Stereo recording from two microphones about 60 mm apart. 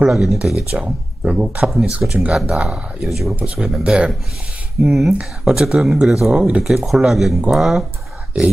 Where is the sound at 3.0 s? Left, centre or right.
Centre.